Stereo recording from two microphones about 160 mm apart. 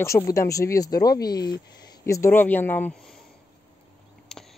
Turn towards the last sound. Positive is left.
turn(degrees=5)  # may be behind; listen again after turning